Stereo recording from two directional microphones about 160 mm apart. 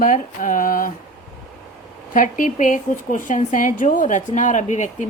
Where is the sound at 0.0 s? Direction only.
55° left (ahead or behind).